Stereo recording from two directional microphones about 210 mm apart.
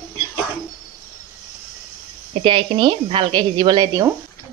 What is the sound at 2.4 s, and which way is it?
Speech, 25° right (ahead or behind).